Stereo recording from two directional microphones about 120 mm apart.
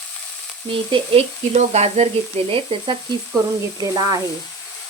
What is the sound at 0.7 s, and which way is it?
Speech, 45° right (ahead or behind).